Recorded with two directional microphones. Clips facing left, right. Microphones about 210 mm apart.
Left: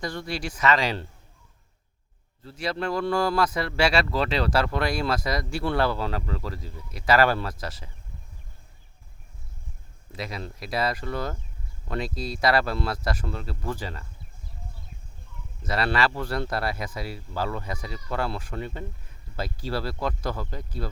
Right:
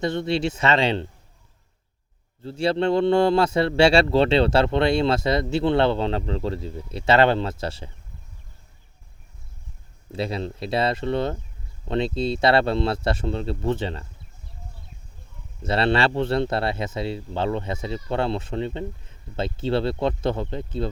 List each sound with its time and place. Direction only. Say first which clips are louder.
0.0 s speech: right 8 dB; 25° right (ahead or behind)
2.4 s speech: right 8 dB; 30° right (ahead or behind)
10.1 s speech: right 8 dB; 30° right (ahead or behind)
15.6 s speech: right 4 dB; 25° right (ahead or behind)